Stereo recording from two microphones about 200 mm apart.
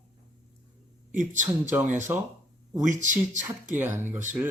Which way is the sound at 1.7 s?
10° right (ahead or behind).